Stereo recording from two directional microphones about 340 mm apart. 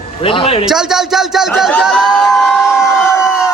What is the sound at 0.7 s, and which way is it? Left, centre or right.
Speech, centre.